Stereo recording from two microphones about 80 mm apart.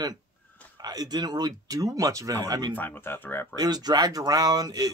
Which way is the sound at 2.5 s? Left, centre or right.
Right.